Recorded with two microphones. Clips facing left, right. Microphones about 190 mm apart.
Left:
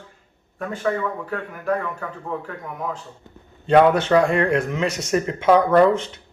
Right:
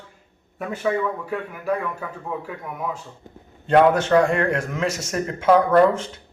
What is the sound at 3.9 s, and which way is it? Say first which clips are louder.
Speech: left 1 dB; 25° left (ahead or behind).